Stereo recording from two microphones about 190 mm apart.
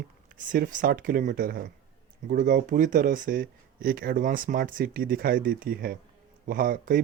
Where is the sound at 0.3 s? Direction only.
45° right (ahead or behind).